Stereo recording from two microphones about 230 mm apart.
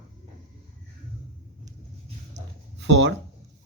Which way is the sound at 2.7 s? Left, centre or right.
Right.